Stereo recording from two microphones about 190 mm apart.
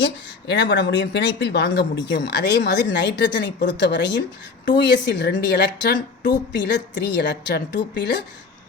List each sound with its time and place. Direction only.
0.0 s a woman's voice: 65° left (ahead or behind)